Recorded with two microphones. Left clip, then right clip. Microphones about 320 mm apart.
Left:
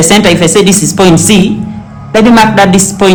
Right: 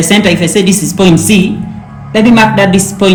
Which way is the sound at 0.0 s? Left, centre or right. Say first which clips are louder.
Left 3 dB; left.